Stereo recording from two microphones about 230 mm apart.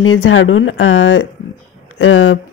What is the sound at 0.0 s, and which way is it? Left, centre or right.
Speech, left.